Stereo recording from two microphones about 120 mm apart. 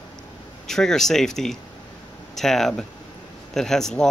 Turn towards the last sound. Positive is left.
turn(degrees=5)  # may be behind; listen again after turning